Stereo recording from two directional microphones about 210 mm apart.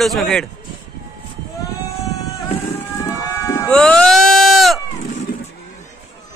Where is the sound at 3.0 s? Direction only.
15° left (ahead or behind).